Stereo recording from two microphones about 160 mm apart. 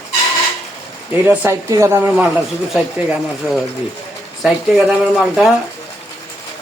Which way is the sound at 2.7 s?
5° right (ahead or behind).